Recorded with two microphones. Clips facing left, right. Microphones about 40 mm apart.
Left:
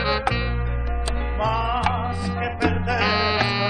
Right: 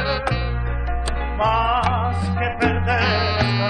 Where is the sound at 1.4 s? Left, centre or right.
Right.